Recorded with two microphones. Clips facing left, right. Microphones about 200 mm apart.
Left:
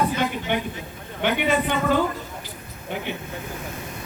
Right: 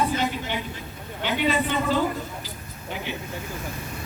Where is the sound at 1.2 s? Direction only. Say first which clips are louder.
Left 2 dB; 55° left (ahead or behind).